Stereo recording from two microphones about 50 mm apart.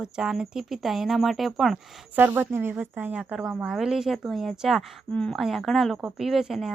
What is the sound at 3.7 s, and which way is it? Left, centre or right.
Speech, centre.